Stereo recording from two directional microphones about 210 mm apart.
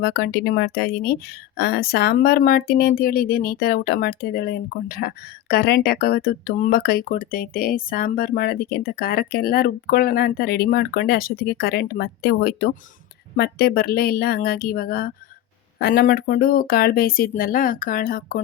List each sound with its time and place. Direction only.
0.0 s speech: 50° left (ahead or behind)